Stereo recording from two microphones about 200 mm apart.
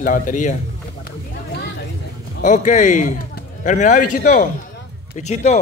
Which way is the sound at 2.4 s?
40° left (ahead or behind).